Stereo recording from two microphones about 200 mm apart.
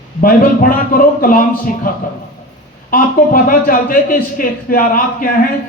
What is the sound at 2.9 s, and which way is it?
A man's voice, 45° left (ahead or behind).